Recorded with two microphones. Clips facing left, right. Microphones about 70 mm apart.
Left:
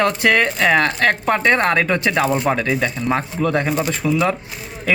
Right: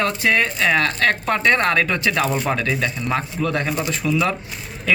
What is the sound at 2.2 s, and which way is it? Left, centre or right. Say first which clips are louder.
Speech: left 3 dB; centre.